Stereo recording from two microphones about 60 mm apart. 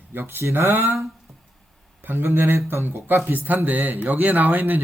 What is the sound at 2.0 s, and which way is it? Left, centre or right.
Speech, right.